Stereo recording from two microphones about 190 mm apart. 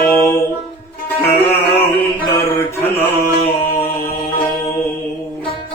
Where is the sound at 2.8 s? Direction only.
10° left (ahead or behind).